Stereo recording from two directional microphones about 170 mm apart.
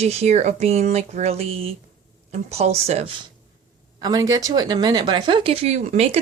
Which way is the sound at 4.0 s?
20° right (ahead or behind).